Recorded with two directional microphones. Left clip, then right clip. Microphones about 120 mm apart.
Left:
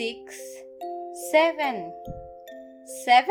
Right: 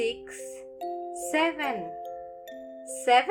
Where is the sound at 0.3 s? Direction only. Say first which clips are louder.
Even; centre (ahead or behind).